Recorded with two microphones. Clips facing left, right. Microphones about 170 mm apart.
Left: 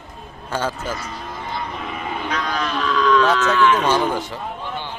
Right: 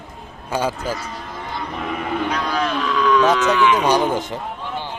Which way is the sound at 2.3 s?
10° right (ahead or behind).